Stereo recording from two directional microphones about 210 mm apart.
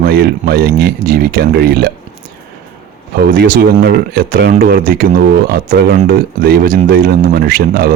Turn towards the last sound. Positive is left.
turn(degrees=-45)  # may be behind; listen again after turning